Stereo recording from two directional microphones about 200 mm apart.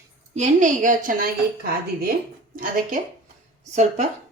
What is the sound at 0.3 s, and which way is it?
Speech, 35° right (ahead or behind).